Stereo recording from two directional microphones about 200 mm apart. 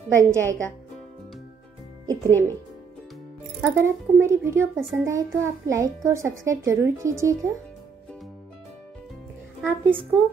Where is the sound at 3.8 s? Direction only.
15° right (ahead or behind).